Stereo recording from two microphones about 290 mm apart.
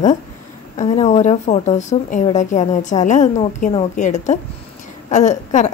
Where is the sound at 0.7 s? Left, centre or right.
Left.